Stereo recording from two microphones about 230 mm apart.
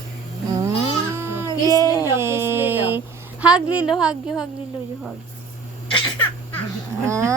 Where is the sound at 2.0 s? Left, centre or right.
Centre.